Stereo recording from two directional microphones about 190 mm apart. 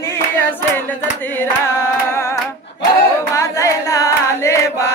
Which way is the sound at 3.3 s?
15° left (ahead or behind).